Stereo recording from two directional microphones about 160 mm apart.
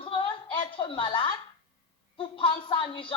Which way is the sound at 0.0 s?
35° left (ahead or behind).